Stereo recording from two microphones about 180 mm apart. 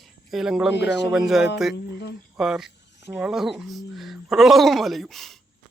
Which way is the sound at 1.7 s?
65° left (ahead or behind).